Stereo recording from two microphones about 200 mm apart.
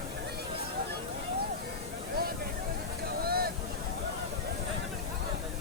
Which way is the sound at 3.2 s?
50° right (ahead or behind).